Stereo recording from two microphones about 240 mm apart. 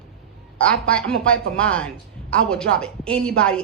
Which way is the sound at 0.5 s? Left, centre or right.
Centre.